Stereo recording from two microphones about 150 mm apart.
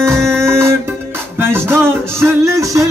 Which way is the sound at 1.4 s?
15° right (ahead or behind).